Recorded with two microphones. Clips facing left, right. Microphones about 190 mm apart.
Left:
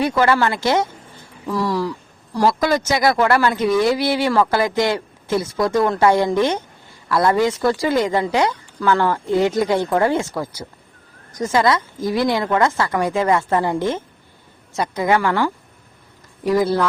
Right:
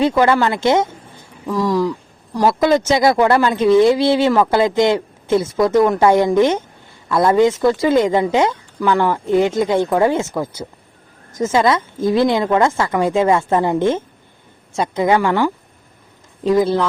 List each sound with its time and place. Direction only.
0.0 s speech: 20° right (ahead or behind)